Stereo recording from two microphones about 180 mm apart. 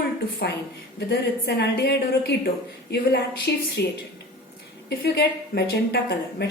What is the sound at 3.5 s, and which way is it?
Speech, 65° left (ahead or behind).